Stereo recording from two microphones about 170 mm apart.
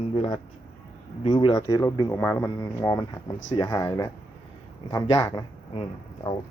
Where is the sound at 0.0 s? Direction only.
35° left (ahead or behind).